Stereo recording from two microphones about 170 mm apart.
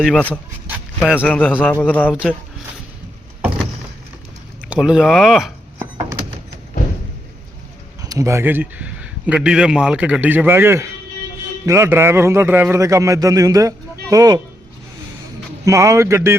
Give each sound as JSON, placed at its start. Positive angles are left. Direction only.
{"t": 0.0, "sound": "speech", "side_deg": 5}
{"t": 0.9, "sound": "speech", "side_deg": -5}
{"t": 1.3, "sound": "speech", "side_deg": 10}
{"t": 4.7, "sound": "speech", "side_deg": -5}
{"t": 8.0, "sound": "a man's voice", "side_deg": -20}
{"t": 15.6, "sound": "a man's voice", "side_deg": -20}